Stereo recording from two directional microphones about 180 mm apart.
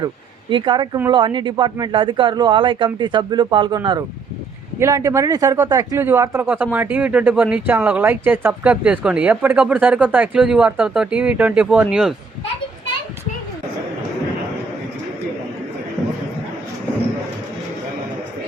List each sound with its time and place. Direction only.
0.5 s a man's voice: 25° right (ahead or behind)
4.8 s a man's voice: 15° right (ahead or behind)